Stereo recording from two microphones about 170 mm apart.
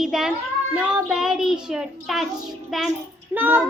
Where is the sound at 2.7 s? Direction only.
Centre (ahead or behind).